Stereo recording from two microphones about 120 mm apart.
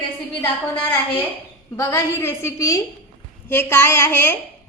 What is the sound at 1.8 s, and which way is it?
A woman's voice, 25° left (ahead or behind).